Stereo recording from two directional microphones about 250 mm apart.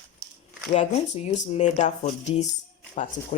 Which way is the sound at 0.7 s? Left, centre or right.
Left.